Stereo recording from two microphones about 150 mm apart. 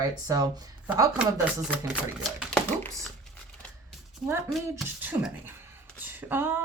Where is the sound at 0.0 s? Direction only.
25° right (ahead or behind).